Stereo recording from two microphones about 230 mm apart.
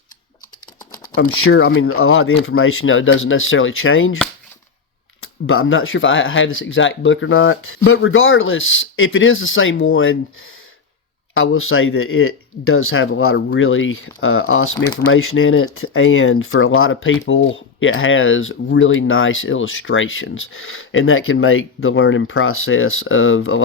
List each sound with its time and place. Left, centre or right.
1.5 s speech: left
5.2 s speech: left